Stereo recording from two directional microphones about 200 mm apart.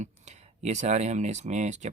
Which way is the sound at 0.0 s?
35° right (ahead or behind).